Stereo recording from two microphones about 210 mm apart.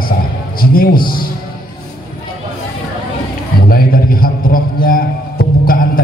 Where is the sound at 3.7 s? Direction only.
45° left (ahead or behind).